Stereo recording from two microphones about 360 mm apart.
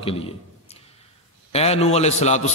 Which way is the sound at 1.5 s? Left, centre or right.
Centre.